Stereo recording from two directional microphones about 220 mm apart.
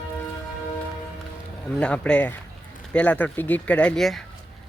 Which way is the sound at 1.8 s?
5° left (ahead or behind).